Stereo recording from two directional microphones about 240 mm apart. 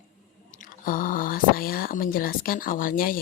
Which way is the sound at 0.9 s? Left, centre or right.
Left.